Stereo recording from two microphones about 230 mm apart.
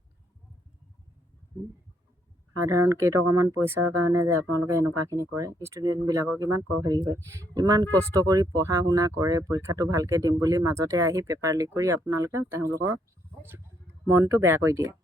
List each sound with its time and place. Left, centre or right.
2.7 s speech: centre
3.8 s speech: right
4.1 s speech: centre
14.1 s speech: centre